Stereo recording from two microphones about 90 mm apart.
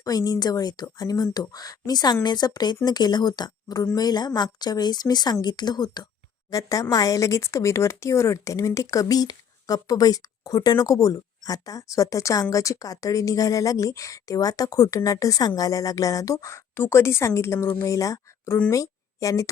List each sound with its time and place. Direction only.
0.0 s speech: 45° left (ahead or behind)
6.5 s speech: 40° left (ahead or behind)